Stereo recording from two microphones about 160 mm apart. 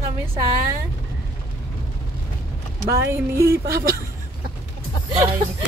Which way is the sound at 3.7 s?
70° right (ahead or behind).